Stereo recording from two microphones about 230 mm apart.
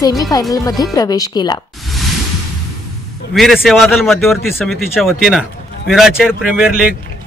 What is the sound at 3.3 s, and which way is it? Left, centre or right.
A man's voice, centre.